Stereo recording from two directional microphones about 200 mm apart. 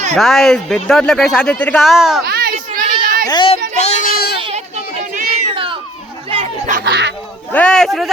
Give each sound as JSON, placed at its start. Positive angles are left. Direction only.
{"t": 0.2, "sound": "speech", "side_deg": 0}
{"t": 2.2, "sound": "a sound", "side_deg": -50}
{"t": 3.2, "sound": "speech", "side_deg": 25}
{"t": 3.8, "sound": "a sound", "side_deg": 35}
{"t": 4.4, "sound": "children playing", "side_deg": -30}
{"t": 5.5, "sound": "cat", "side_deg": -25}
{"t": 6.3, "sound": "chatter", "side_deg": -30}
{"t": 6.7, "sound": "speech", "side_deg": -55}
{"t": 7.5, "sound": "speech", "side_deg": 5}